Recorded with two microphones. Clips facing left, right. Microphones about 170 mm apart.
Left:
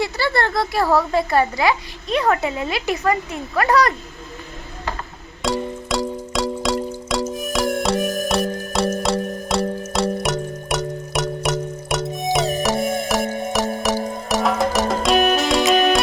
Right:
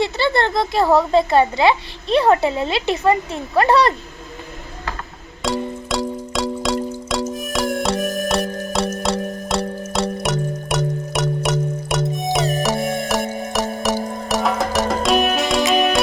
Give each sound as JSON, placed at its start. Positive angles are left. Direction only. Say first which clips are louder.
{"t": 0.0, "sound": "speech", "louder": "right 2 dB", "side_deg": -20}
{"t": 5.4, "sound": "music", "louder": "even", "side_deg": 0}